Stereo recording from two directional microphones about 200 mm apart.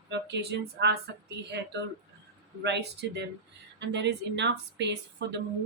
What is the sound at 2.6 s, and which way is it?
A woman's voice, 60° right (ahead or behind).